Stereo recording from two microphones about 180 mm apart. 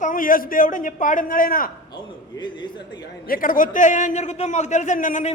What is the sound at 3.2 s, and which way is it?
A man's voice, 50° left (ahead or behind).